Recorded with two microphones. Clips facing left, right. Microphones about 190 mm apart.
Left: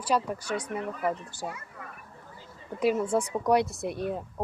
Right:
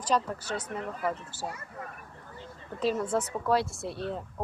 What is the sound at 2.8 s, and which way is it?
Speech, 10° left (ahead or behind).